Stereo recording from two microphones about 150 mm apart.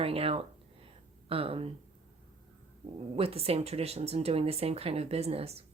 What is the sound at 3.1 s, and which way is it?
Speech, 40° right (ahead or behind).